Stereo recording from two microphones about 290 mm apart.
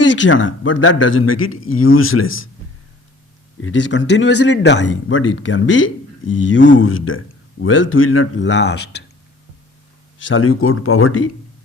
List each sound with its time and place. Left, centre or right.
0.0 s speech: left
3.6 s speech: left
10.2 s speech: left